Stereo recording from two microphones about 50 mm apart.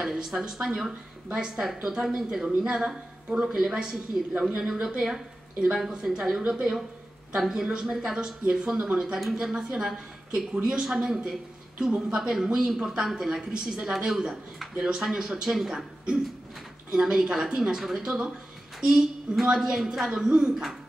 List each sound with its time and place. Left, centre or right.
0.0 s speech: centre
7.3 s speech: centre
12.2 s speech: centre
14.8 s speech: centre
16.9 s speech: centre